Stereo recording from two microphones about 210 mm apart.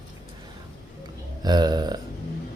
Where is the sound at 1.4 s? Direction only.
20° right (ahead or behind).